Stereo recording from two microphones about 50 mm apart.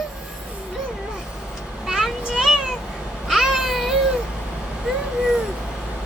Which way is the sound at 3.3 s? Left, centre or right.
Centre.